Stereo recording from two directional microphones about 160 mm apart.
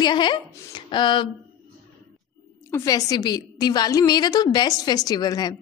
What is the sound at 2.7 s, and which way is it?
A woman's voice, 20° left (ahead or behind).